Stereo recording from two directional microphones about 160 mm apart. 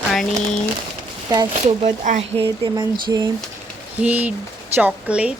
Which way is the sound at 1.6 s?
45° right (ahead or behind).